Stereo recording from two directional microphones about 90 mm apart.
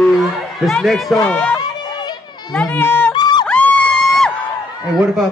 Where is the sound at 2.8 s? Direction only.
20° left (ahead or behind).